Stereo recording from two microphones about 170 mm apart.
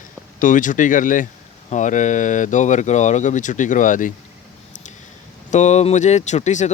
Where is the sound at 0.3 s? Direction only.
50° left (ahead or behind).